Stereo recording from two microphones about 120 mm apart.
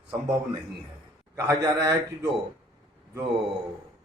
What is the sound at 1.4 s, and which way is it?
Speech, 25° right (ahead or behind).